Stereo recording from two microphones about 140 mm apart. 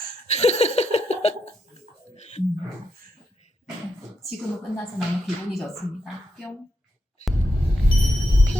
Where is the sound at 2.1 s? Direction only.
55° left (ahead or behind).